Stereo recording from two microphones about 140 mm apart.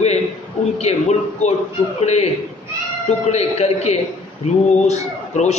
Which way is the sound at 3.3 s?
50° left (ahead or behind).